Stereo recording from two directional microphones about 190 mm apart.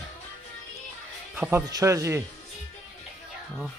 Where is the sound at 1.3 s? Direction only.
5° right (ahead or behind).